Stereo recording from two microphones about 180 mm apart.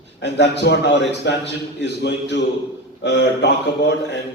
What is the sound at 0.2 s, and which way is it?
A man's voice, 70° left (ahead or behind).